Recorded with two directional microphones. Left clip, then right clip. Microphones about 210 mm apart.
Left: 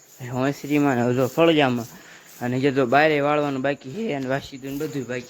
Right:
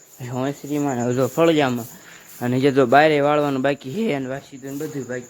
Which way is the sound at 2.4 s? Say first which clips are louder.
Right 4 dB; 15° right (ahead or behind).